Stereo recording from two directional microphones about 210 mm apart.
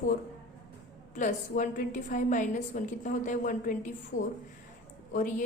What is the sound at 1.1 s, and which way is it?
A woman's voice, 40° left (ahead or behind).